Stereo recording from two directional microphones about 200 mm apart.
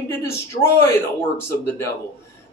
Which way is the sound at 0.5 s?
40° left (ahead or behind).